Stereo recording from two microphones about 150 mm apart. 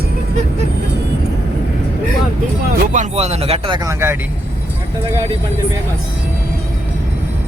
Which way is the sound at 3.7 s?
20° right (ahead or behind).